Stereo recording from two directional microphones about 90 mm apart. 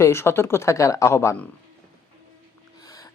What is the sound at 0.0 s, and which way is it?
Speech, 30° left (ahead or behind).